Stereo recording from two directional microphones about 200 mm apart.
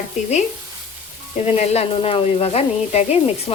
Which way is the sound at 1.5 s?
30° left (ahead or behind).